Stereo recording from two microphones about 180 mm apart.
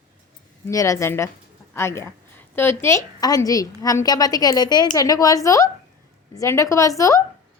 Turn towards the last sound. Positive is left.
turn(degrees=15)  # may be behind; listen again after turning